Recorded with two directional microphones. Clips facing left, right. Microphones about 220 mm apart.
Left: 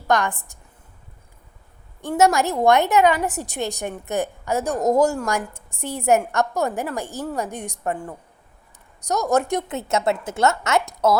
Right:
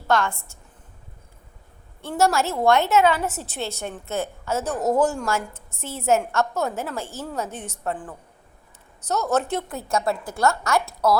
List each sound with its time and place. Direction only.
0.1 s a woman's voice: 15° left (ahead or behind)
2.0 s a woman's voice: 15° left (ahead or behind)